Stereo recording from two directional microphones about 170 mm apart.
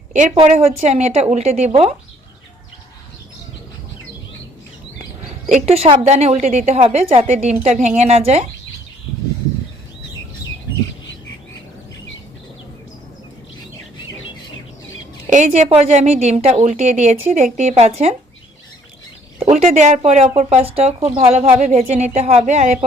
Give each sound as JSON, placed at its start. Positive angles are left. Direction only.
{"t": 0.1, "sound": "a woman's voice", "side_deg": -45}
{"t": 5.5, "sound": "a woman's voice", "side_deg": -40}
{"t": 15.3, "sound": "a woman's voice", "side_deg": -45}
{"t": 19.4, "sound": "a woman's voice", "side_deg": -45}